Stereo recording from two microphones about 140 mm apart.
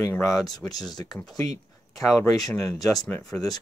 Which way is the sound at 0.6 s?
10° left (ahead or behind).